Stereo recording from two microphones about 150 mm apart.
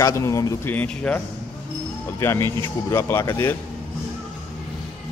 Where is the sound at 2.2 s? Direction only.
20° left (ahead or behind).